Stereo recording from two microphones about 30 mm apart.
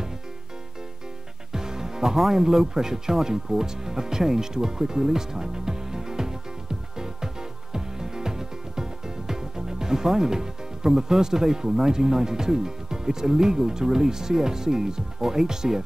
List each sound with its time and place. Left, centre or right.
1.5 s music: centre
2.1 s speech: centre
7.0 s music: centre